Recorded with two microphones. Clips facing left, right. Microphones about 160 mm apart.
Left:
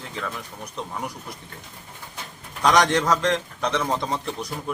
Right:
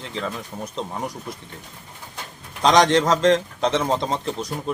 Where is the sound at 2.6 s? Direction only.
20° right (ahead or behind).